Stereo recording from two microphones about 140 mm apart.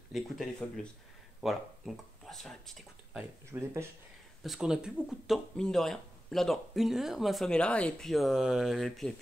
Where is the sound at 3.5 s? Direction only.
20° right (ahead or behind).